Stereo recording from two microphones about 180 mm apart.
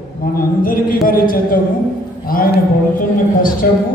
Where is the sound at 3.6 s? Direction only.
55° left (ahead or behind).